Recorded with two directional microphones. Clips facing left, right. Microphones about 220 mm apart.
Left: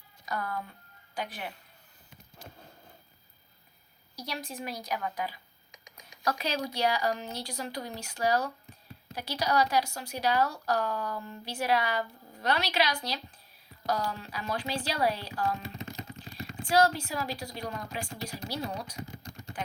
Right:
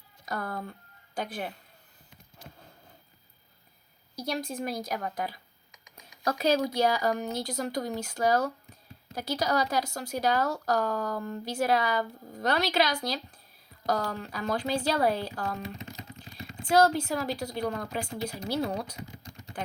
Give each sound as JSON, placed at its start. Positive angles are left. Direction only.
{"t": 0.3, "sound": "a sound", "side_deg": -40}
{"t": 1.1, "sound": "a woman's voice", "side_deg": -50}
{"t": 4.1, "sound": "speech", "side_deg": -50}
{"t": 16.6, "sound": "speech", "side_deg": -45}